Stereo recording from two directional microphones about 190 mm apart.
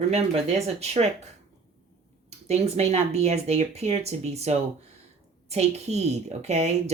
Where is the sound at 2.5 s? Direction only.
35° right (ahead or behind).